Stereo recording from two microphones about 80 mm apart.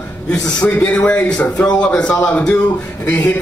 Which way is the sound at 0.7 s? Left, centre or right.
Centre.